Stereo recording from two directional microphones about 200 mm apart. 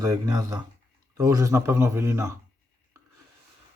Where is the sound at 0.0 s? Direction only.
15° right (ahead or behind).